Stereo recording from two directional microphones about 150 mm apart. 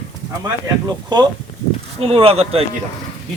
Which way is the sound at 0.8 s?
25° right (ahead or behind).